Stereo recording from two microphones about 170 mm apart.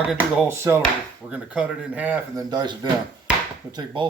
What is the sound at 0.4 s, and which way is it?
Speech, 15° right (ahead or behind).